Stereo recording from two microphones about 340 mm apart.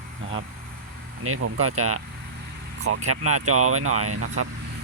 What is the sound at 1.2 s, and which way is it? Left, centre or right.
Speech, right.